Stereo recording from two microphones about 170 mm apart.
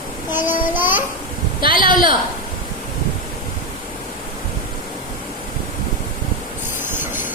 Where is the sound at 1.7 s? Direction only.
55° left (ahead or behind).